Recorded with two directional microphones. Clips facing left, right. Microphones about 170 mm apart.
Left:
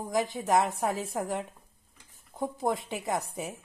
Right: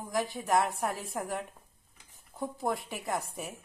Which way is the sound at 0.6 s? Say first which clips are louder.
Left 3 dB; 20° left (ahead or behind).